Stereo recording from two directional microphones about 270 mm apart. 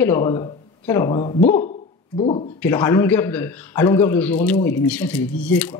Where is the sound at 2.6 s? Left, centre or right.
Centre.